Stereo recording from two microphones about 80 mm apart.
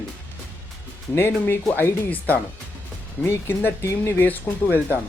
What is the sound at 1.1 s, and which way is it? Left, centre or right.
Speech, left.